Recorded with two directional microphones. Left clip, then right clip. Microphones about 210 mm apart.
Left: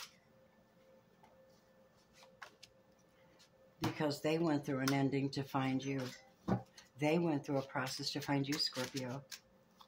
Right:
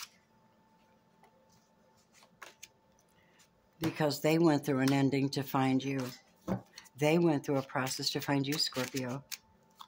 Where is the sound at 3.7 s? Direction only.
50° right (ahead or behind).